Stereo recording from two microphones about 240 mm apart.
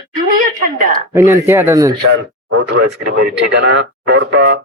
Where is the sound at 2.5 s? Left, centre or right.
Right.